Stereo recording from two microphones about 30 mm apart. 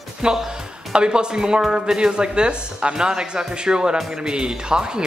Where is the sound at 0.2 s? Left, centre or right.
Right.